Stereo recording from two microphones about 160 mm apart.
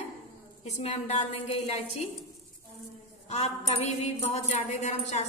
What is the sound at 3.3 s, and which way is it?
A woman's voice, 40° left (ahead or behind).